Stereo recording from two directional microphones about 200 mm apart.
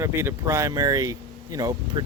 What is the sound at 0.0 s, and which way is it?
Speech, 15° right (ahead or behind).